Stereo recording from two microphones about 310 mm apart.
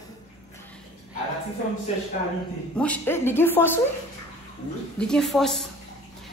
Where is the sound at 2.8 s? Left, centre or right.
Centre.